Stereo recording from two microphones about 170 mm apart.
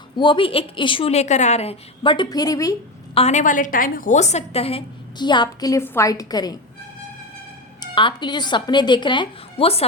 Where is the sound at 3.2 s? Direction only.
40° left (ahead or behind); by 6.6 s 25° left (ahead or behind).